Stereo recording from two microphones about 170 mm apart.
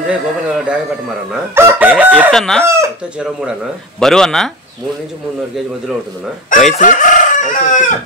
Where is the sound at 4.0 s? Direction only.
Centre (ahead or behind).